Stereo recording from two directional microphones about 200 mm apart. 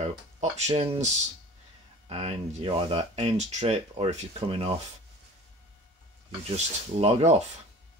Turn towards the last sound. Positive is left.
turn(degrees=-35)  # may be behind; listen again after turning